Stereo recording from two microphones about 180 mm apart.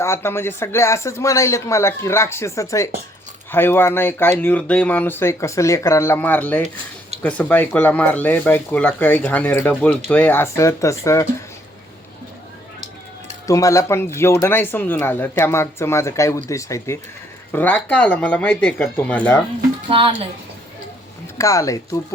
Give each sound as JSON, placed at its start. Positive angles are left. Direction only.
{"t": 0.0, "sound": "speech", "side_deg": 15}
{"t": 13.5, "sound": "speech", "side_deg": 15}
{"t": 19.9, "sound": "speech", "side_deg": -30}
{"t": 21.3, "sound": "speech", "side_deg": 15}